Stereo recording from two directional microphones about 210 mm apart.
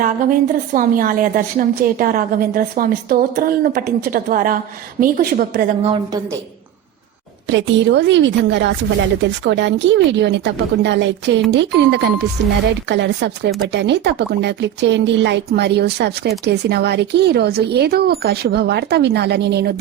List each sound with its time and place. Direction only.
0.0 s a woman's voice: 40° right (ahead or behind)
5.8 s a woman's voice: 25° right (ahead or behind)
7.4 s a woman's voice: 60° right (ahead or behind)